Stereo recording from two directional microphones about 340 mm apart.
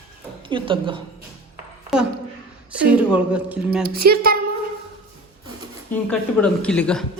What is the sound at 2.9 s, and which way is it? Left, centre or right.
Speech, centre.